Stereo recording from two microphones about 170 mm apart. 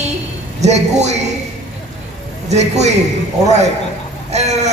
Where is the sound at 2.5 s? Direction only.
40° right (ahead or behind).